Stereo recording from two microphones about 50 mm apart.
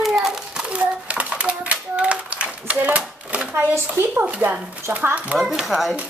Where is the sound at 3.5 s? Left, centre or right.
Right.